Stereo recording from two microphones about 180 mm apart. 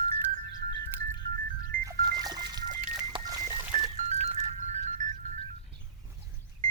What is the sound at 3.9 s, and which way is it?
Music, 35° right (ahead or behind).